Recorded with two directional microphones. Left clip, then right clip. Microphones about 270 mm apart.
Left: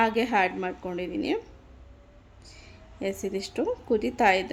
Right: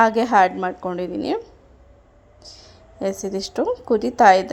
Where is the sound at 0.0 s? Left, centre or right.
Centre.